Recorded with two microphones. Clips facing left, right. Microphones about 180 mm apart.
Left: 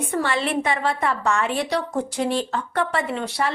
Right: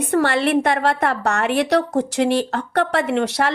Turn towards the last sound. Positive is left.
turn(degrees=-75)  # may be behind; listen again after turning